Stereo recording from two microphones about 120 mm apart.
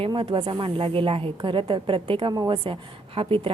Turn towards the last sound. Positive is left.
turn(degrees=-50)  # may be behind; listen again after turning